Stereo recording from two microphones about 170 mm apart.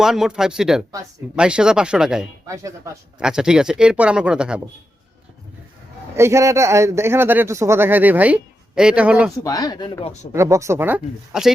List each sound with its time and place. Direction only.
0.0 s a man's voice: 5° right (ahead or behind)
2.5 s a man's voice: 20° right (ahead or behind)
3.2 s a man's voice: 5° right (ahead or behind)
6.1 s a man's voice: 15° right (ahead or behind)
9.4 s speech: 20° left (ahead or behind)
10.3 s a man's voice: 15° right (ahead or behind)